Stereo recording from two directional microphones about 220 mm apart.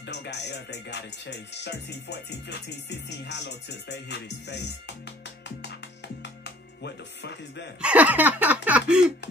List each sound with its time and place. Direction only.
0.0 s music: 50° left (ahead or behind)
6.4 s speech: 50° left (ahead or behind)
7.8 s a sound: 5° right (ahead or behind)